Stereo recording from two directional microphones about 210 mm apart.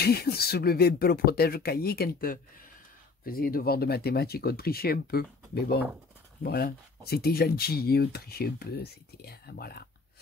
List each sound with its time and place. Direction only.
0.0 s speech: 50° left (ahead or behind)